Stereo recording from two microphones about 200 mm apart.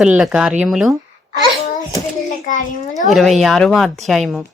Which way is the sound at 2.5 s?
40° left (ahead or behind).